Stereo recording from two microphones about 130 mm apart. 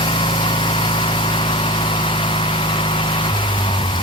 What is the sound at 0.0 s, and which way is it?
Vehicle, 40° left (ahead or behind).